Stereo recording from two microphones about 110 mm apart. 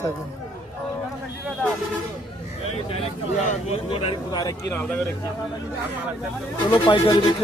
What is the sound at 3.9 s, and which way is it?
Speech, 50° left (ahead or behind).